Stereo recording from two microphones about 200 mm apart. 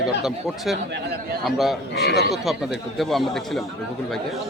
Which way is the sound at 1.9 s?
55° left (ahead or behind).